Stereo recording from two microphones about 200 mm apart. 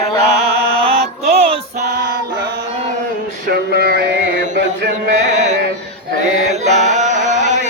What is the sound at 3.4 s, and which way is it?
Chant, 50° right (ahead or behind).